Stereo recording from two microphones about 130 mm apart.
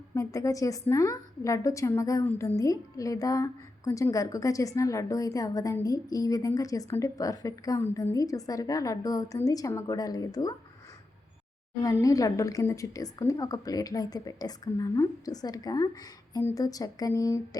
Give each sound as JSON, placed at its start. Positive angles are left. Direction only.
{"t": 0.1, "sound": "a woman's voice", "side_deg": 25}
{"t": 11.8, "sound": "a woman's voice", "side_deg": 25}